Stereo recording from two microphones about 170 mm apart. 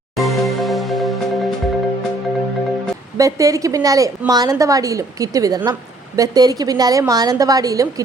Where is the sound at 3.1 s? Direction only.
20° right (ahead or behind).